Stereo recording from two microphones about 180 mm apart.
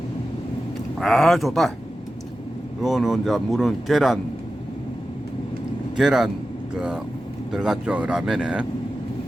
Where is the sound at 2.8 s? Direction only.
Centre (ahead or behind).